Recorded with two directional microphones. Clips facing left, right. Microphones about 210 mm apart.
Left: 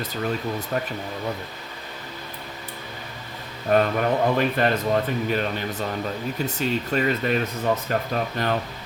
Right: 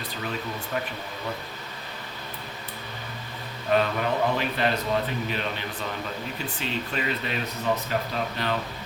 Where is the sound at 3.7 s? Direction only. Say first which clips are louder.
Left 4 dB; 50° left (ahead or behind).